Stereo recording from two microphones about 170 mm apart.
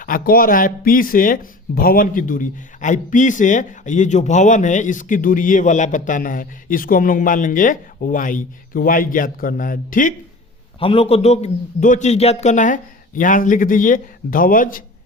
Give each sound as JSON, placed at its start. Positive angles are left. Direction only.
{"t": 0.0, "sound": "speech", "side_deg": 55}
{"t": 10.8, "sound": "speech", "side_deg": 35}